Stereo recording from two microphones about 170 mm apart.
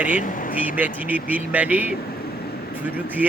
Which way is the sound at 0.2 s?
50° left (ahead or behind).